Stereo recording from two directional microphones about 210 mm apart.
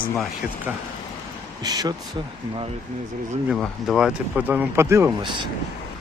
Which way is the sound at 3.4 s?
Centre (ahead or behind).